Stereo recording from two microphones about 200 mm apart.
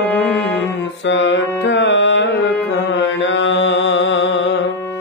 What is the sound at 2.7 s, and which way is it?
Mantra, 65° left (ahead or behind).